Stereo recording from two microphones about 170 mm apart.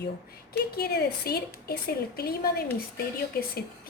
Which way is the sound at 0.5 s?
65° left (ahead or behind).